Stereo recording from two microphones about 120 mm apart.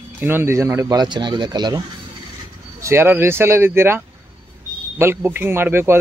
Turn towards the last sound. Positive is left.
turn(degrees=-20)  # may be behind; listen again after turning